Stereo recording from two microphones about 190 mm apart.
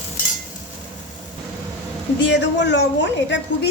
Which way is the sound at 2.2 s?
65° left (ahead or behind).